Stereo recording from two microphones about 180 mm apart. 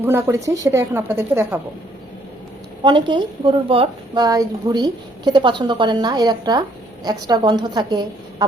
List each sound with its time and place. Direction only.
0.0 s a woman's voice: 15° right (ahead or behind)
2.8 s a woman's voice: 25° right (ahead or behind)